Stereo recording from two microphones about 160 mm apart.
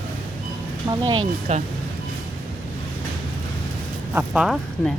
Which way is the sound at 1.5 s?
45° right (ahead or behind).